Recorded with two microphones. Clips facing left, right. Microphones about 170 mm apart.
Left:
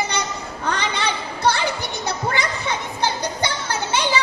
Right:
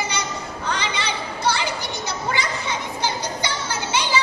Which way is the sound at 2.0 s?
55° left (ahead or behind).